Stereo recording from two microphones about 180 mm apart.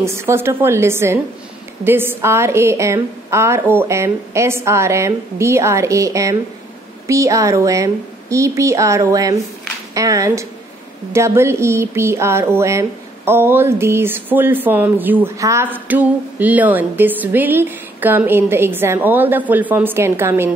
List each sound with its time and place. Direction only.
0.0 s a woman's voice: 15° right (ahead or behind)